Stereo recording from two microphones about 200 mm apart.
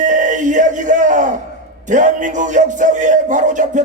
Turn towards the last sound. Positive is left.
turn(degrees=-40)  # may be behind; listen again after turning